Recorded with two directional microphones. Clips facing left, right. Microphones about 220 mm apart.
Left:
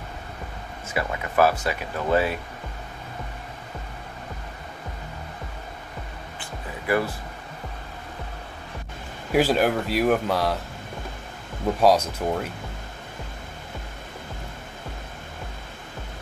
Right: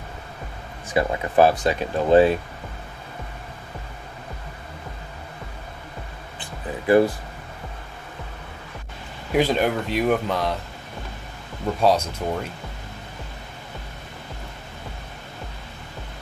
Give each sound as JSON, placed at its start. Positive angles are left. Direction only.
{"t": 0.9, "sound": "speech", "side_deg": -30}
{"t": 2.0, "sound": "speech", "side_deg": -20}
{"t": 9.3, "sound": "speech", "side_deg": 5}
{"t": 11.6, "sound": "speech", "side_deg": 10}